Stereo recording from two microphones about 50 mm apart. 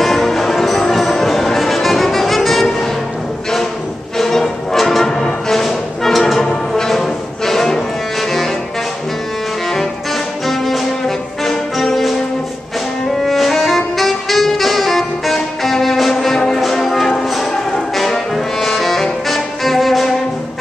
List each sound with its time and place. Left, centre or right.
0.0 s music: centre
4.2 s music: centre
10.4 s music: centre
13.2 s saxophone: centre
16.6 s music: centre
17.9 s brass instrument: centre